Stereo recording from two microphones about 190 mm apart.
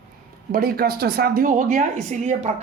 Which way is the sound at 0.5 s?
50° right (ahead or behind).